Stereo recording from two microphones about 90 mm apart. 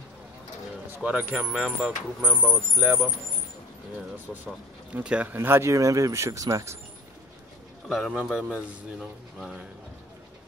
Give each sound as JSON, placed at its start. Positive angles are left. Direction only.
{"t": 0.9, "sound": "speech", "side_deg": -15}
{"t": 4.9, "sound": "speech", "side_deg": -15}
{"t": 5.3, "sound": "speech", "side_deg": -25}
{"t": 7.9, "sound": "a man's voice", "side_deg": -5}